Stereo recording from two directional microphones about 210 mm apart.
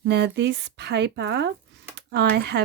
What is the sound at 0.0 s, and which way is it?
A woman's voice, 55° right (ahead or behind).